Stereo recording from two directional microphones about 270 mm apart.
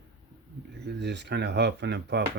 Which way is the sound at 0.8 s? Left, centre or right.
Right.